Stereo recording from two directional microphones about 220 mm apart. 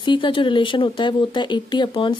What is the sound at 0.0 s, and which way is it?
Speech, 20° left (ahead or behind).